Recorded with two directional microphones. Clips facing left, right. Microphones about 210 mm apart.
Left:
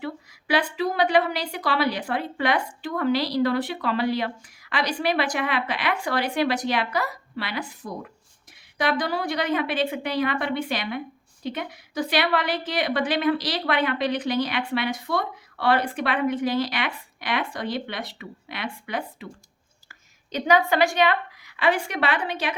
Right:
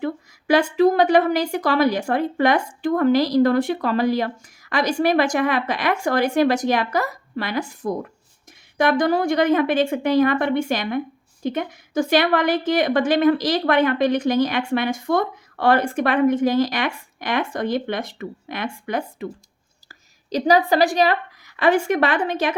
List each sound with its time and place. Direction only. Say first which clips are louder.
0.0 s a woman's voice: right 7 dB; 45° right (ahead or behind)